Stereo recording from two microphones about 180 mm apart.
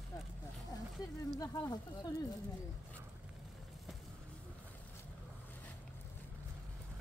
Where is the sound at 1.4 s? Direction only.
20° left (ahead or behind).